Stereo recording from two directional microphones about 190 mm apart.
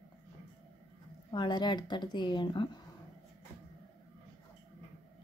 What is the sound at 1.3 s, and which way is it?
Speech, 25° left (ahead or behind).